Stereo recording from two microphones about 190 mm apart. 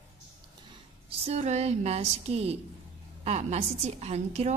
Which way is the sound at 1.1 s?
35° right (ahead or behind).